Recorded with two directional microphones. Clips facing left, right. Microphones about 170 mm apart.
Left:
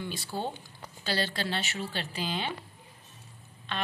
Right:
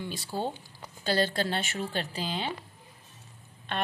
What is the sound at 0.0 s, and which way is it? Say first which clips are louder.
Speech: right 1 dB; 35° right (ahead or behind).